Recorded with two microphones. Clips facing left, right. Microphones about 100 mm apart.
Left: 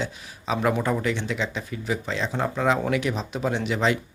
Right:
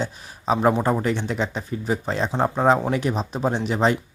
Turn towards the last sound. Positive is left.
turn(degrees=-40)  # may be behind; listen again after turning